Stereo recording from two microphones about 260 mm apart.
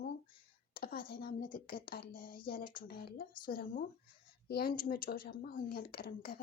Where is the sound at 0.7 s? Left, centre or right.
Left.